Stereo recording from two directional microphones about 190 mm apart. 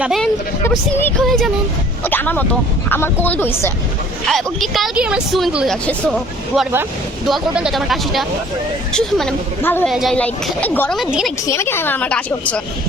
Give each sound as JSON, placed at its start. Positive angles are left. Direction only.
{"t": 0.0, "sound": "a woman's voice", "side_deg": 0}
{"t": 11.5, "sound": "a woman's voice", "side_deg": 15}